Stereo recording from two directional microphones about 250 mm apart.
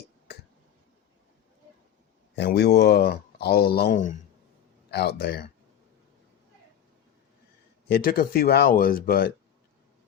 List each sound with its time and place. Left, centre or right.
2.3 s speech: left
7.9 s speech: left